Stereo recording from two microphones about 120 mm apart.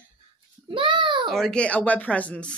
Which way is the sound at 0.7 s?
40° right (ahead or behind).